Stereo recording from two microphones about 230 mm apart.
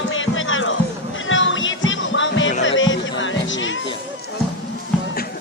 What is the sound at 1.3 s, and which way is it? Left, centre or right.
Music, left.